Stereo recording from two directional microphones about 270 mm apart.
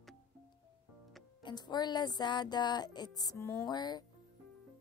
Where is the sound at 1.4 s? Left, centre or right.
Centre.